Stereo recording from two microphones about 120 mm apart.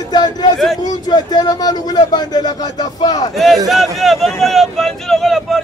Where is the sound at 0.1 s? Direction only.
35° left (ahead or behind).